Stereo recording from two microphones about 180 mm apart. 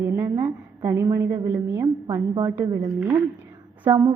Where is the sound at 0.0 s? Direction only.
15° right (ahead or behind).